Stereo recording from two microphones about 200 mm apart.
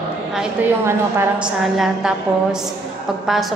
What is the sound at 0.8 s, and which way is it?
Speech, 10° right (ahead or behind).